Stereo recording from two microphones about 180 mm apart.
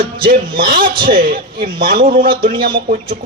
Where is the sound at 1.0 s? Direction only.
50° right (ahead or behind).